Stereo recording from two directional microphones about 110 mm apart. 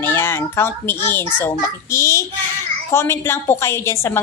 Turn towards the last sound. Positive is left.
turn(degrees=25)  # may be behind; listen again after turning